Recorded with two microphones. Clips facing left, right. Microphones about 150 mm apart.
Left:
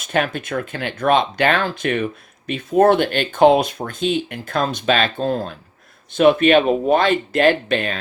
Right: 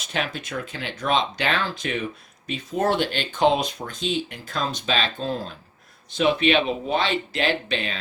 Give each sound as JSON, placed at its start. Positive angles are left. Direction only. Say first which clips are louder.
{"t": 0.0, "sound": "speech", "louder": "left 7 dB", "side_deg": 50}